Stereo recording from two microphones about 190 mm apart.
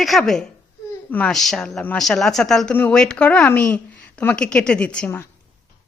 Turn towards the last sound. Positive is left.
turn(degrees=10)  # may be behind; listen again after turning